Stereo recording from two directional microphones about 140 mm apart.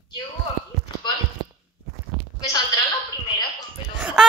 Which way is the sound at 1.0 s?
30° left (ahead or behind).